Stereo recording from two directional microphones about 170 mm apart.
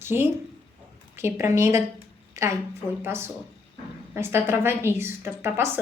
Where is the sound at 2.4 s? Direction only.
20° right (ahead or behind).